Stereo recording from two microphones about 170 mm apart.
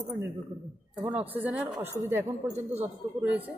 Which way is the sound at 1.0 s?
10° right (ahead or behind).